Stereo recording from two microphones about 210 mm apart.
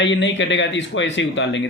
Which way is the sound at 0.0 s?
60° left (ahead or behind).